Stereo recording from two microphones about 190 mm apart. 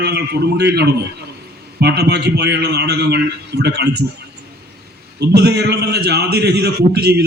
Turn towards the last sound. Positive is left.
turn(degrees=-60)  # may be behind; listen again after turning